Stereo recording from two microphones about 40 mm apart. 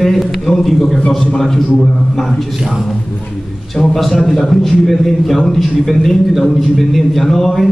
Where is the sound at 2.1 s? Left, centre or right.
Centre.